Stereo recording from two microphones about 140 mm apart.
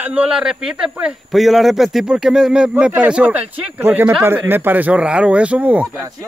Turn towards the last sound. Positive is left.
turn(degrees=-10)  # may be behind; listen again after turning